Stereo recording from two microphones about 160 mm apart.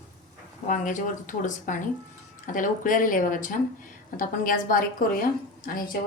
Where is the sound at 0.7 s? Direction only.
55° left (ahead or behind).